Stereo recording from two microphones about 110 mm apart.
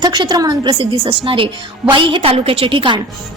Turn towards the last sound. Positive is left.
turn(degrees=-50)  # may be behind; listen again after turning